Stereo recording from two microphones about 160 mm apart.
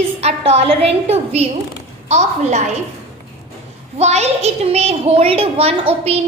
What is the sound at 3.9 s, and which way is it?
A woman's voice, 45° right (ahead or behind).